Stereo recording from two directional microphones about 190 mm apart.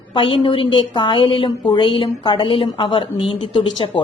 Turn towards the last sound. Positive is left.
turn(degrees=25)  # may be behind; listen again after turning